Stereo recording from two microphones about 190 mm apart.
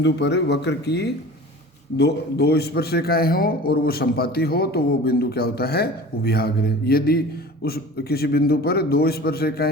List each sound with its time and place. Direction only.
0.0 s a man's voice: 65° left (ahead or behind)